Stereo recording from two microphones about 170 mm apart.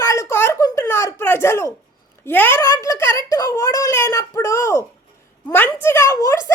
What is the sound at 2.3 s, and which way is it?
A child's voice, 10° left (ahead or behind).